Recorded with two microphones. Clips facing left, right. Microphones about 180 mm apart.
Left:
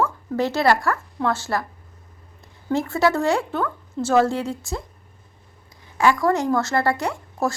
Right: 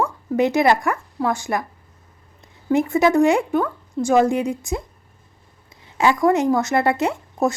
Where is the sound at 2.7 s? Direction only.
15° right (ahead or behind).